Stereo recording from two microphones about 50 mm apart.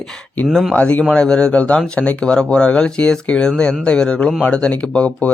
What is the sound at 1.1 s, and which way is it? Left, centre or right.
Speech, centre.